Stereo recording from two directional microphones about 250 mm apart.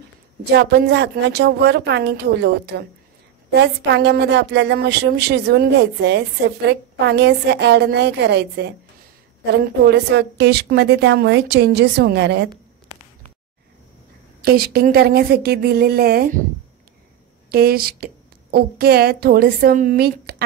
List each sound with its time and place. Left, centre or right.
0.5 s a woman's voice: right
14.4 s a woman's voice: right
17.5 s a woman's voice: right